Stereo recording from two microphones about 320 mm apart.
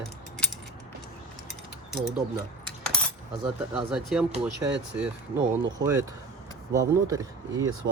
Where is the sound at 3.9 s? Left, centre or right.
Centre.